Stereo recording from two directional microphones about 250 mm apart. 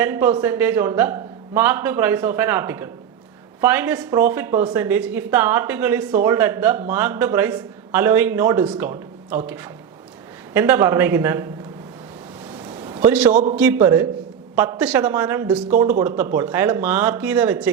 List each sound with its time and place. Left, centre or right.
0.0 s a woman's voice: centre
10.5 s a woman's voice: centre
12.5 s a sound: centre
13.3 s a man's voice: right
13.6 s a woman's voice: centre